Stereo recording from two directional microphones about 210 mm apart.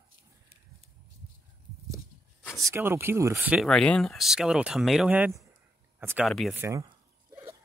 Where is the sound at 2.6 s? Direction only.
15° right (ahead or behind).